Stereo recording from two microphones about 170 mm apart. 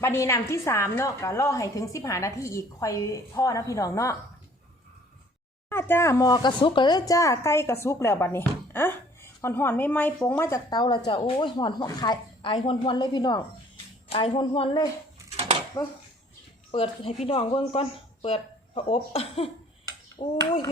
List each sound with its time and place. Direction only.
0.0 s a woman's voice: 15° left (ahead or behind)
5.6 s speech: 15° left (ahead or behind); by 14.8 s 30° left (ahead or behind)
15.3 s a sound: 40° right (ahead or behind)
15.8 s speech: 25° left (ahead or behind)